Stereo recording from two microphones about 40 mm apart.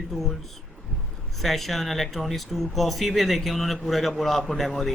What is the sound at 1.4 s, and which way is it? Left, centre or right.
Speech, centre.